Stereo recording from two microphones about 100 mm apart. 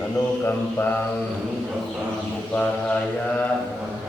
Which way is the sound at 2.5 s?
10° left (ahead or behind).